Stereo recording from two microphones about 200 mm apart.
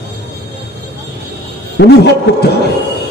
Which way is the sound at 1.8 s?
55° left (ahead or behind).